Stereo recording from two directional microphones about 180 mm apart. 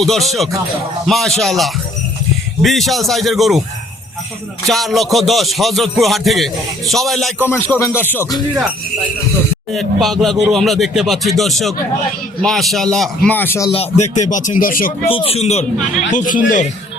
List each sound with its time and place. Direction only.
0.0 s rapping: centre (ahead or behind)
4.6 s rapping: centre (ahead or behind)
7.4 s speech: 10° left (ahead or behind)
9.7 s rapping: centre (ahead or behind)
13.2 s speech: 10° left (ahead or behind)
13.7 s speech: 35° left (ahead or behind); by 14.9 s 50° left (ahead or behind)
15.0 s speech: 30° left (ahead or behind)
16.1 s speech: 45° left (ahead or behind)